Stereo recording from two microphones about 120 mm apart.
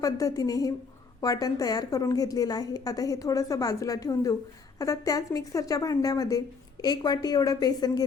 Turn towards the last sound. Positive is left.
turn(degrees=35)  # may be behind; listen again after turning